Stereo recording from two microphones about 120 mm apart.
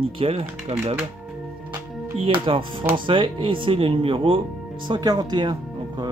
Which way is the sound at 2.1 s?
45° right (ahead or behind).